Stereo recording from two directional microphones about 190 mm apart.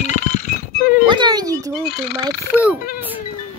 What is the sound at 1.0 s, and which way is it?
Music, 25° right (ahead or behind).